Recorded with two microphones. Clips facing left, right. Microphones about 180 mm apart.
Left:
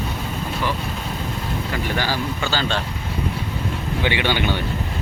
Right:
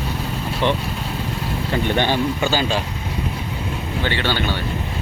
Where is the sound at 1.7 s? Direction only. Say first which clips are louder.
Right 6 dB; 25° right (ahead or behind).